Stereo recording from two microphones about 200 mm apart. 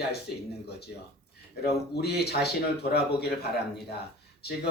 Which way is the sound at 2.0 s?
55° left (ahead or behind).